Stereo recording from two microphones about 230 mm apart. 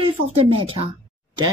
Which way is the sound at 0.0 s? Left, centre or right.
Right.